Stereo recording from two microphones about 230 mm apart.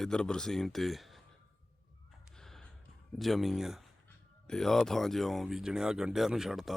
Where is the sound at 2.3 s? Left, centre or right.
Centre.